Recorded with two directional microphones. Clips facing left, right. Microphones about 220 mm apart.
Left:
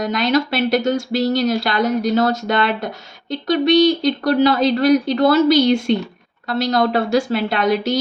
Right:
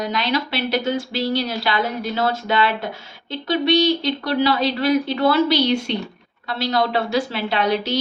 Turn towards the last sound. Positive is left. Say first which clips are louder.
# left 3 dB
turn(degrees=50)  # may be behind; listen again after turning